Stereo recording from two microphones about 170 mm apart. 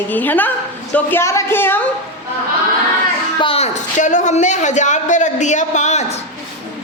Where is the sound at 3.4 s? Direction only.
35° left (ahead or behind).